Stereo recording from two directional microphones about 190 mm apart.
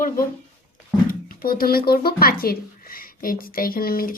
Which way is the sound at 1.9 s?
50° left (ahead or behind).